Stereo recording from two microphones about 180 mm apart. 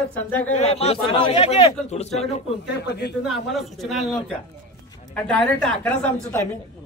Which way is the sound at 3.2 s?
Centre (ahead or behind).